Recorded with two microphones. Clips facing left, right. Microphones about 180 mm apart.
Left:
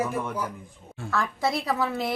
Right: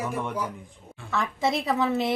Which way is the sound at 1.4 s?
20° right (ahead or behind).